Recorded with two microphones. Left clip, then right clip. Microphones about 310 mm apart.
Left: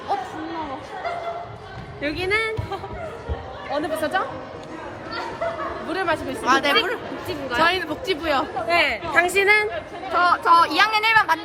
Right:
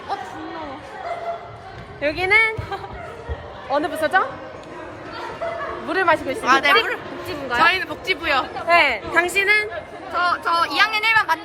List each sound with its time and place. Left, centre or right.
2.0 s speech: centre
3.7 s speech: right
5.9 s speech: right
6.4 s speech: centre
8.6 s speech: centre
9.3 s speech: centre